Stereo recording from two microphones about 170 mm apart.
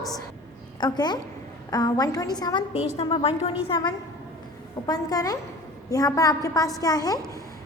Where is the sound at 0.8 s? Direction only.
25° left (ahead or behind).